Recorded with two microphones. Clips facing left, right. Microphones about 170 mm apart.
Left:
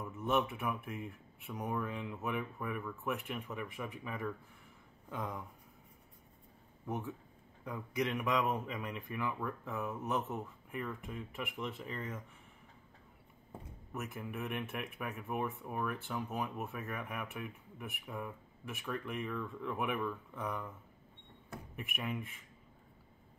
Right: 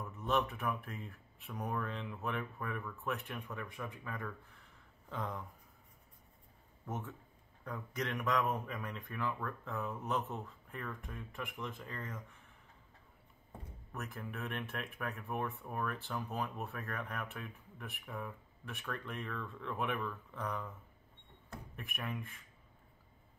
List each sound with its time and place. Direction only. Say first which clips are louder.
0.7 s speech: left 3 dB; 15° left (ahead or behind)
1.5 s speech: left 1 dB; 5° left (ahead or behind)
6.9 s speech: left 3 dB; 10° left (ahead or behind)
13.9 s speech: left 3 dB; 15° left (ahead or behind)
15.2 s speech: left 3 dB; 15° left (ahead or behind)
16.3 s speech: left 1 dB; 15° left (ahead or behind)
21.7 s speech: left 3 dB; 10° left (ahead or behind)